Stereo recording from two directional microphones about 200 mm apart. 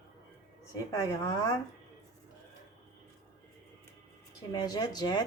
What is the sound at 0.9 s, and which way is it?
Speech, 20° left (ahead or behind).